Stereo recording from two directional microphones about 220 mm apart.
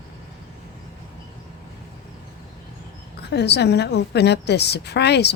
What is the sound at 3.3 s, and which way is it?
A woman's voice, 50° left (ahead or behind).